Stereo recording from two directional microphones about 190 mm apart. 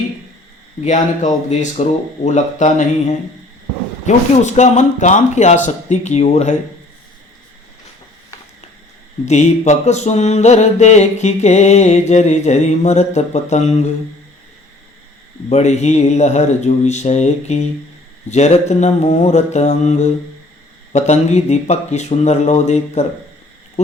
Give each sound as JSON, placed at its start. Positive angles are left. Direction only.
{"t": 0.8, "sound": "mantra", "side_deg": 40}
{"t": 9.2, "sound": "mantra", "side_deg": 35}
{"t": 15.4, "sound": "mantra", "side_deg": 35}